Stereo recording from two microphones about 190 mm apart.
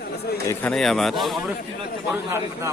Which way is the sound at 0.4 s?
5° left (ahead or behind).